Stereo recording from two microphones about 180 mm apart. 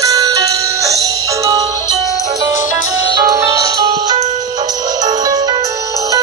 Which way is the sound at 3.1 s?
20° right (ahead or behind).